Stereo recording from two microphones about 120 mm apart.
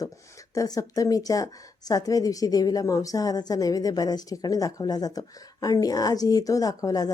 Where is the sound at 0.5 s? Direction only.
30° left (ahead or behind).